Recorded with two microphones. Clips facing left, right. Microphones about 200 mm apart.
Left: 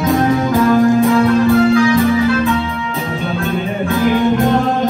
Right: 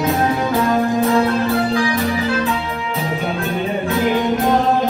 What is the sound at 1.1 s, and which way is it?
Music, 30° right (ahead or behind).